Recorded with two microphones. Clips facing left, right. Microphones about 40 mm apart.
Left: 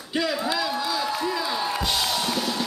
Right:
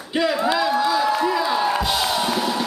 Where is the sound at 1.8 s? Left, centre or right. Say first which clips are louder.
Right 4 dB; centre.